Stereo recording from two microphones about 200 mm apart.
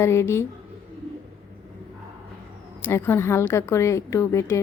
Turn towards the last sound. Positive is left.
turn(degrees=15)  # may be behind; listen again after turning